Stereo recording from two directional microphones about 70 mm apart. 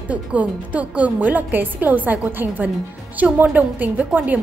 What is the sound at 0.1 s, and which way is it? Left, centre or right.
A woman's voice, right.